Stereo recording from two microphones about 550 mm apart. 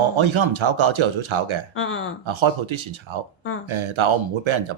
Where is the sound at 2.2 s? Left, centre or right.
Right.